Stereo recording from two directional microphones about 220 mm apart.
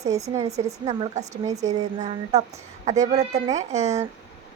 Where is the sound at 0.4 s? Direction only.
30° right (ahead or behind).